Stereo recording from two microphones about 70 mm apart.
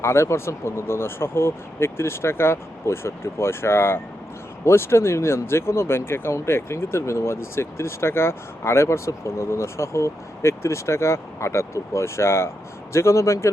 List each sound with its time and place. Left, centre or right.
0.0 s speech: left